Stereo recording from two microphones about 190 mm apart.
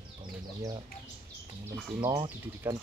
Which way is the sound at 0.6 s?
20° right (ahead or behind).